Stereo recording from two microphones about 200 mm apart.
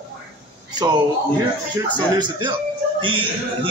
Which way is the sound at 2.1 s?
20° right (ahead or behind).